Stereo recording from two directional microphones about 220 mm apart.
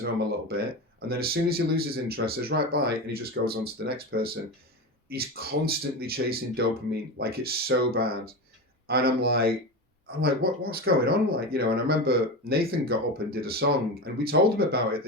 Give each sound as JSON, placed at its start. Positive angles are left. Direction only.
{"t": 0.0, "sound": "speech", "side_deg": -45}